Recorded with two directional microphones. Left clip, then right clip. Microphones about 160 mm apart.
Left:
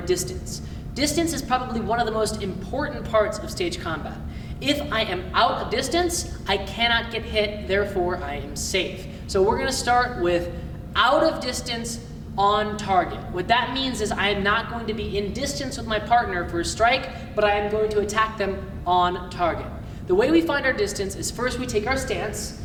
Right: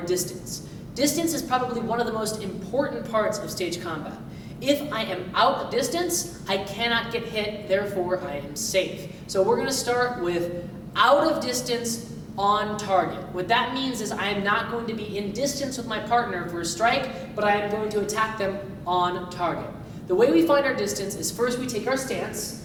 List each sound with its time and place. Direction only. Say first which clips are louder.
0.1 s a woman's voice: left 3 dB; 20° left (ahead or behind)